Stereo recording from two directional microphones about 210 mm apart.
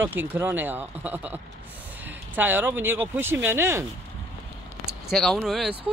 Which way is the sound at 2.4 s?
10° right (ahead or behind).